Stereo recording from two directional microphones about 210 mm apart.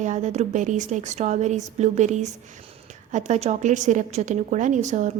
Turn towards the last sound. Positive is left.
turn(degrees=-35)  # may be behind; listen again after turning